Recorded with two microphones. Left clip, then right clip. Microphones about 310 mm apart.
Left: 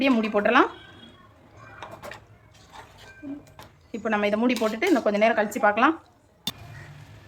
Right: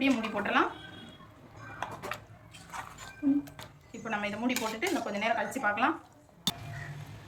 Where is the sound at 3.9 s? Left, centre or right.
Centre.